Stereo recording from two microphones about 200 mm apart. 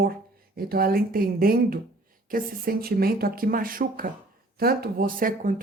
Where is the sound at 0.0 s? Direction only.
50° right (ahead or behind).